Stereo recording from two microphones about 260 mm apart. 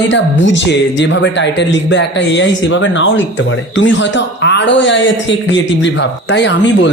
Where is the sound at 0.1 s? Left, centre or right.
Left.